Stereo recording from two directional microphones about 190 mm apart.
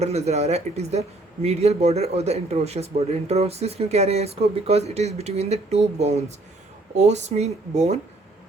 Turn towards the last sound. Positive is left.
turn(degrees=-35)  # may be behind; listen again after turning